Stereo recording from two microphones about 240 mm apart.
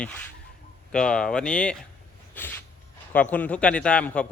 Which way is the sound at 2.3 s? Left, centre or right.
Centre.